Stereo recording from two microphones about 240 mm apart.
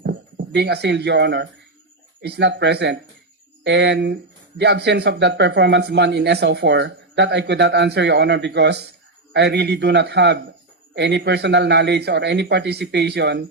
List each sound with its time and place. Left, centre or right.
0.0 s speech: right